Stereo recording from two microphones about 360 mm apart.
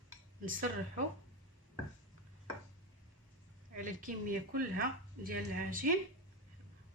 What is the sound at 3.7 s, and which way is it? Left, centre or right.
A woman's voice, right.